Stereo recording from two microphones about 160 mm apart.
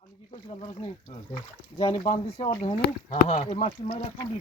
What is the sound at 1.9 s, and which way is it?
Speech, 50° left (ahead or behind).